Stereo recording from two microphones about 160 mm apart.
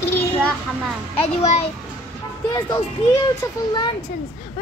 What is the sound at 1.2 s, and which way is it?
Speech, 40° left (ahead or behind).